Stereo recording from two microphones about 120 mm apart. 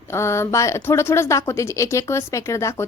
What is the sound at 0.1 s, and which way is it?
A woman's voice, 25° left (ahead or behind).